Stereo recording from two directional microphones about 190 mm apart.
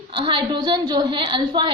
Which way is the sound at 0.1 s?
25° right (ahead or behind).